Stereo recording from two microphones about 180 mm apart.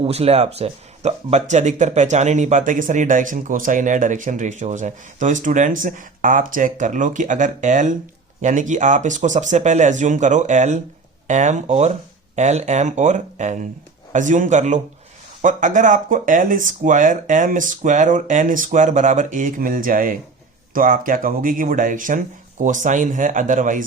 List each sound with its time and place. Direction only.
0.0 s speech: 35° right (ahead or behind)